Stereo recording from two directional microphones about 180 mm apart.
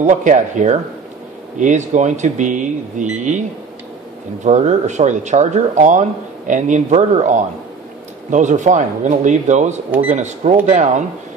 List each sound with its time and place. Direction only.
0.0 s speech: 45° right (ahead or behind)
4.5 s speech: 40° right (ahead or behind)